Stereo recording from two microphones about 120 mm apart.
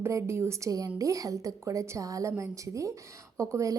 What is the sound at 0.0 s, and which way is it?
A woman's voice, 20° right (ahead or behind).